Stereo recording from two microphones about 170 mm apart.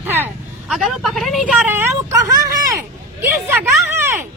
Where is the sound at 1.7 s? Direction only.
15° right (ahead or behind).